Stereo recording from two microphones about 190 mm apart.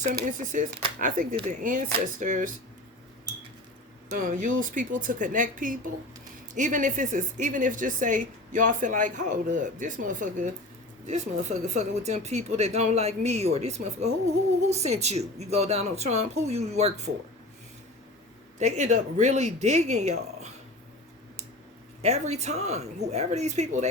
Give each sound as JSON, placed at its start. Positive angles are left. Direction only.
{"t": 0.0, "sound": "a woman's voice", "side_deg": -45}
{"t": 4.1, "sound": "a woman's voice", "side_deg": -45}
{"t": 18.6, "sound": "speech", "side_deg": -40}
{"t": 22.0, "sound": "speech", "side_deg": -35}